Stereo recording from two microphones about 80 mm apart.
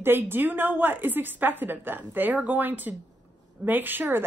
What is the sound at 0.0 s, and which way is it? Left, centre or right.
A woman's voice, right.